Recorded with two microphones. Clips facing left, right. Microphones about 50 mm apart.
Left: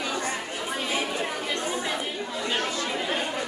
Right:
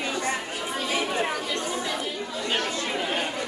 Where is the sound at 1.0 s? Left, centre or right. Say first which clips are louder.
Right 3 dB; right.